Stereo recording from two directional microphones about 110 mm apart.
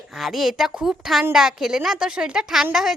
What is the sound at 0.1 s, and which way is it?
Speech, centre (ahead or behind).